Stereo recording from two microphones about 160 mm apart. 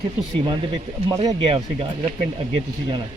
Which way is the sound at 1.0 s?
25° right (ahead or behind).